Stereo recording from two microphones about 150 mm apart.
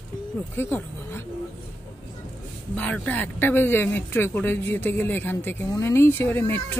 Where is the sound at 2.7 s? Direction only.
10° left (ahead or behind).